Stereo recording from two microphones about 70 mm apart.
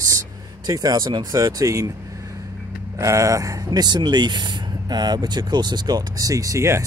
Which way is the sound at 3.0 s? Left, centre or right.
Right.